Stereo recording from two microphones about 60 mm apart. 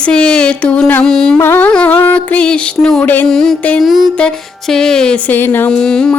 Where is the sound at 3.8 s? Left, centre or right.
Centre.